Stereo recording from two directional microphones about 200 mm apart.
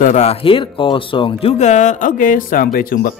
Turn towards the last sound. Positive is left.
turn(degrees=45)  # may be behind; listen again after turning